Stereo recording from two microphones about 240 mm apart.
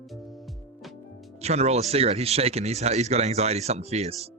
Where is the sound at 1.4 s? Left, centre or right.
Right.